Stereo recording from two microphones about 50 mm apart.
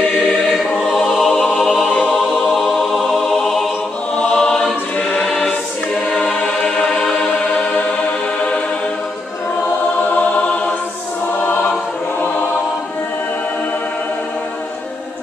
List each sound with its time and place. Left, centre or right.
0.6 s choir: centre
1.6 s music: centre
4.3 s choir: centre
6.1 s choir: centre